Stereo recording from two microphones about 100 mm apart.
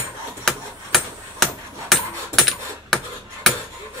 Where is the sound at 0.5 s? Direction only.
Centre (ahead or behind).